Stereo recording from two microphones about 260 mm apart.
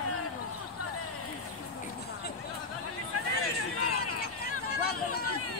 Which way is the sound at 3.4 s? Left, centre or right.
Left.